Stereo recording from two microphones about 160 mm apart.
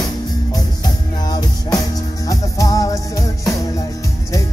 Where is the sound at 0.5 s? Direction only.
25° left (ahead or behind).